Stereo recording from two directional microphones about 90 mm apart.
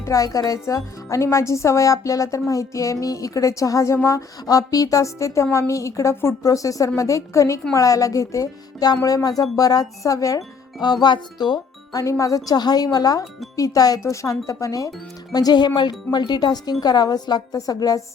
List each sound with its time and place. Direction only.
0.0 s speech: 40° left (ahead or behind)
12.0 s speech: 35° left (ahead or behind)